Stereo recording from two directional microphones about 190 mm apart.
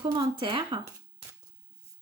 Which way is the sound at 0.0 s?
25° right (ahead or behind).